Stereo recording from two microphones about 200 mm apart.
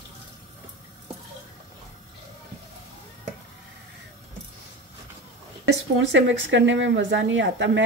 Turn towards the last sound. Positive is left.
turn(degrees=-65)  # may be behind; listen again after turning